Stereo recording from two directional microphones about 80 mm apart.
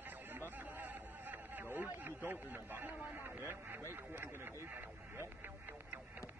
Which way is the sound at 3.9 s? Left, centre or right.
Right.